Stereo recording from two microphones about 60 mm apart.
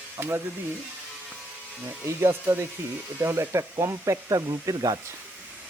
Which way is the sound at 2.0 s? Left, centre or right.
Right.